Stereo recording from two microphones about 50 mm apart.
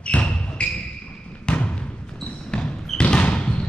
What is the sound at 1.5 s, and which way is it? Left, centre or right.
Thump, left.